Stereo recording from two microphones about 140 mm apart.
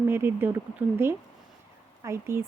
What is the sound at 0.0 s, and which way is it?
A woman's voice, 15° right (ahead or behind).